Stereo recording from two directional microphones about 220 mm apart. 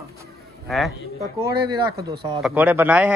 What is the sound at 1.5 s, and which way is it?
A man's voice, 20° right (ahead or behind).